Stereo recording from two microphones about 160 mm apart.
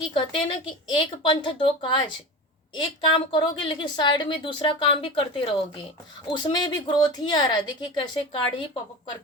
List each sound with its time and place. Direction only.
0.1 s a woman's voice: 35° left (ahead or behind)